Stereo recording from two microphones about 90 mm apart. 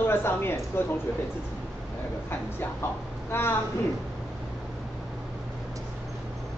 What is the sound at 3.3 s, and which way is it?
Speech, 25° left (ahead or behind).